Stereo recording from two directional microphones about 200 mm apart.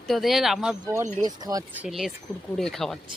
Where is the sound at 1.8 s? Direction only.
Centre (ahead or behind).